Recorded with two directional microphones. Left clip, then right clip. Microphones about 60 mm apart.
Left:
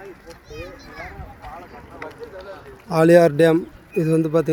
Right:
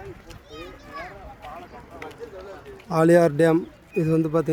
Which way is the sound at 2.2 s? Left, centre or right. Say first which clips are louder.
Left 3 dB; centre.